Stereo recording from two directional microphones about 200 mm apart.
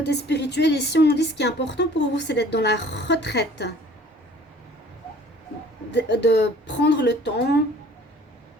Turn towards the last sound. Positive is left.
turn(degrees=55)  # may be behind; listen again after turning